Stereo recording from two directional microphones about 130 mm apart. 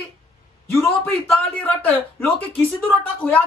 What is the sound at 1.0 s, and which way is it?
Speech, 15° left (ahead or behind).